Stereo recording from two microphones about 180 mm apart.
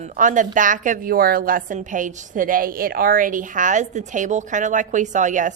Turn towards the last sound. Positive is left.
turn(degrees=-45)  # may be behind; listen again after turning